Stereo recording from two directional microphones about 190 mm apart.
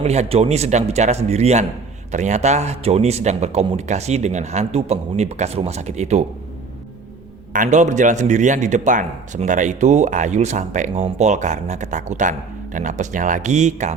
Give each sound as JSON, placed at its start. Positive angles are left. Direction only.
{"t": 0.0, "sound": "a man's voice", "side_deg": -35}
{"t": 7.5, "sound": "a man's voice", "side_deg": -40}